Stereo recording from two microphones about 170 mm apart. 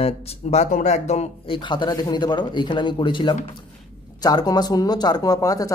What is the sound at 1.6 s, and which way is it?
Speech, 25° left (ahead or behind).